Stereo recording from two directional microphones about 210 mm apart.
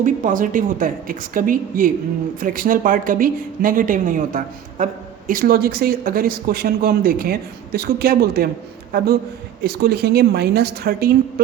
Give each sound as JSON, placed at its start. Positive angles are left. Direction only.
{"t": 0.0, "sound": "speech", "side_deg": -40}